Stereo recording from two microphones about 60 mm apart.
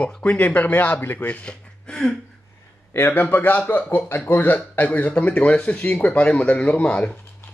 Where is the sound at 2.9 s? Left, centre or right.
Left.